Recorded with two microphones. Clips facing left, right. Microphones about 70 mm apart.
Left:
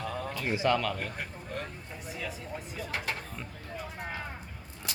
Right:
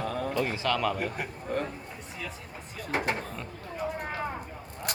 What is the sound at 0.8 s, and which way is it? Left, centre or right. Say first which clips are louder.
Speech: right 4 dB; centre.